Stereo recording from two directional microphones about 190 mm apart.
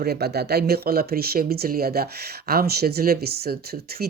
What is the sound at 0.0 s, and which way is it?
Speech, 55° right (ahead or behind).